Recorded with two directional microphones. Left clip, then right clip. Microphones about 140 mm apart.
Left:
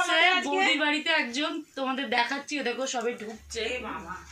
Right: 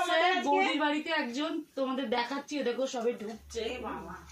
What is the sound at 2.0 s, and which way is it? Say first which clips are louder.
Speech: left 5 dB; 25° right (ahead or behind).